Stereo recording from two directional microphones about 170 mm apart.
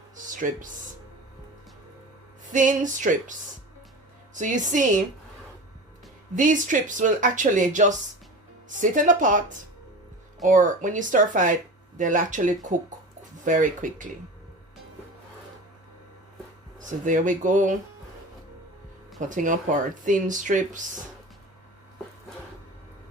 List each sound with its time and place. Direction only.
0.3 s speech: 50° right (ahead or behind)
2.5 s speech: 50° right (ahead or behind)
4.4 s speech: 45° right (ahead or behind)
6.3 s speech: 50° right (ahead or behind)
10.4 s speech: 50° right (ahead or behind)
17.1 s speech: 50° right (ahead or behind)
19.2 s speech: 50° right (ahead or behind)